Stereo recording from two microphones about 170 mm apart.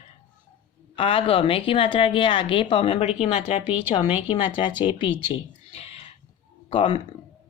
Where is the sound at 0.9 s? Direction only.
30° left (ahead or behind).